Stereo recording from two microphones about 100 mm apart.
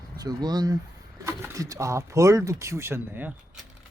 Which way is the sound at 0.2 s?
40° right (ahead or behind).